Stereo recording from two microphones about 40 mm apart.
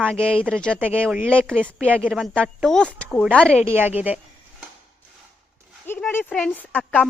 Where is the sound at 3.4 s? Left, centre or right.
Left.